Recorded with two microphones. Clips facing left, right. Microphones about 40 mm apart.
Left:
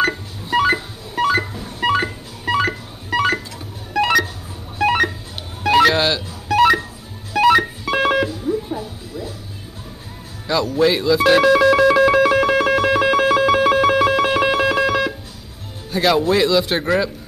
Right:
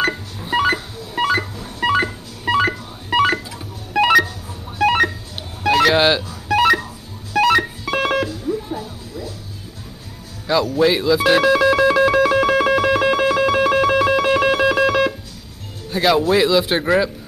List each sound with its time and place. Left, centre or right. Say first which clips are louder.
0.0 s telephone dialing: left 1 dB; centre
1.5 s music: even; centre
4.7 s telephone dialing: right 1 dB; centre
5.6 s music: left 1 dB; centre
5.9 s speech: right 3 dB; centre
6.5 s music: left 1 dB; centre
10.4 s speech: right 1 dB; centre
12.1 s music: left 1 dB; centre
15.9 s speech: right 1 dB; centre